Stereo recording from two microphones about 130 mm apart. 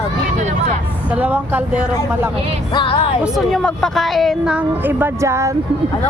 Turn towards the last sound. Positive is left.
turn(degrees=-20)  # may be behind; listen again after turning